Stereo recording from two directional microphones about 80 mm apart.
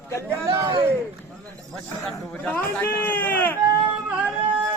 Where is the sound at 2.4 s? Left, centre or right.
Centre.